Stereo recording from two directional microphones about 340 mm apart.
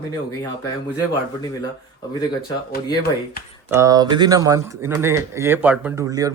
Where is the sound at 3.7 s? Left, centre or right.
Centre.